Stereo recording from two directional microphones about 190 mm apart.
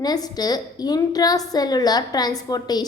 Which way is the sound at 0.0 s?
20° left (ahead or behind).